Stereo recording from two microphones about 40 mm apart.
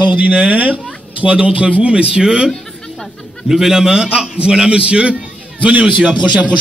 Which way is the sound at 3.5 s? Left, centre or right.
Centre.